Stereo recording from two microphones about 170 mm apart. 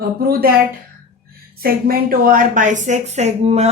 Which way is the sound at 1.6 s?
60° right (ahead or behind).